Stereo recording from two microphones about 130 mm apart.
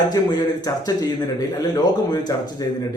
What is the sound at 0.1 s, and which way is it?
Speech, 30° left (ahead or behind).